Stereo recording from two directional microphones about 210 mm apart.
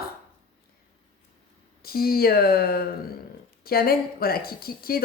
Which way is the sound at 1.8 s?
45° left (ahead or behind).